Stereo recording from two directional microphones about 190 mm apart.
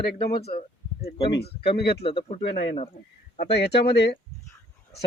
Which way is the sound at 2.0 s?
30° left (ahead or behind).